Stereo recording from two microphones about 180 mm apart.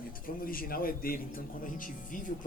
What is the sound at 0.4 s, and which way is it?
Speech, 55° left (ahead or behind).